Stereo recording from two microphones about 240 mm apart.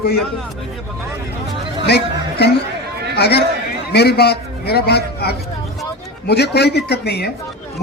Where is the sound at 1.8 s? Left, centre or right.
Left.